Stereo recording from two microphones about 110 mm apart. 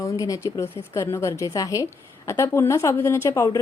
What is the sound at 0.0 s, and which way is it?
A woman's voice, 30° left (ahead or behind).